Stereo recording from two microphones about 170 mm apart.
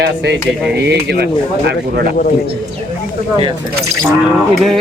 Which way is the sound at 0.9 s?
80° right.